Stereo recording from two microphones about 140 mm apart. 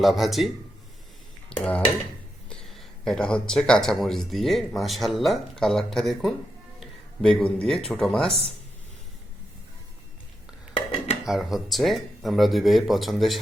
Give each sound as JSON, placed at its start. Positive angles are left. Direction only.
{"t": 0.0, "sound": "speech", "side_deg": 0}
{"t": 1.5, "sound": "speech", "side_deg": 5}
{"t": 6.7, "sound": "a sound", "side_deg": 0}
{"t": 7.9, "sound": "speech", "side_deg": 5}
{"t": 10.8, "sound": "dishes", "side_deg": 40}
{"t": 11.3, "sound": "speech", "side_deg": -5}